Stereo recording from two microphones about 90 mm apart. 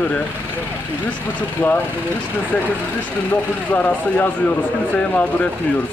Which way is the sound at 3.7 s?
20° left (ahead or behind).